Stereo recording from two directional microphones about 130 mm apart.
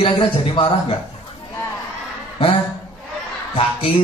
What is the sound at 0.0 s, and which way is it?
Speech, 45° left (ahead or behind).